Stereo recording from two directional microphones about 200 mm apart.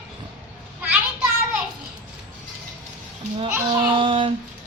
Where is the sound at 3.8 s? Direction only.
25° right (ahead or behind).